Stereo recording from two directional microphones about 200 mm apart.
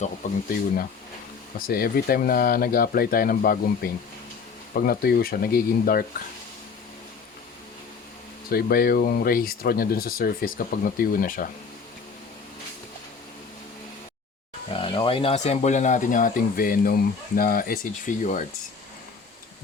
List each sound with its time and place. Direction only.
0.2 s speech: 40° left (ahead or behind)
1.6 s speech: 50° left (ahead or behind)
8.4 s speech: 50° left (ahead or behind)
14.7 s speech: 25° left (ahead or behind)